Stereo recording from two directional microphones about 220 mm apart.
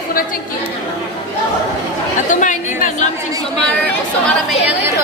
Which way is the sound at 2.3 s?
35° left (ahead or behind).